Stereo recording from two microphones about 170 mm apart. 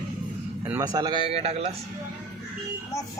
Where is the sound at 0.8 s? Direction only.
25° right (ahead or behind).